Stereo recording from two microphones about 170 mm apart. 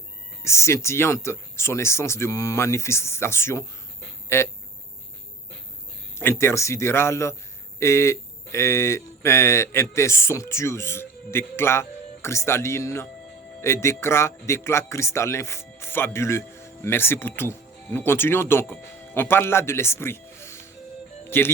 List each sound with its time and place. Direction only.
0.4 s speech: 15° left (ahead or behind)
6.1 s a man's voice: 15° left (ahead or behind)